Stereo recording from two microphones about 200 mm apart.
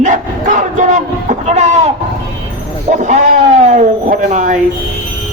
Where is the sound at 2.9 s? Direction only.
35° right (ahead or behind).